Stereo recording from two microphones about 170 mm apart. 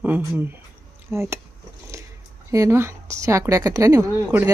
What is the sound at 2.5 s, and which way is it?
A woman's voice, 15° right (ahead or behind).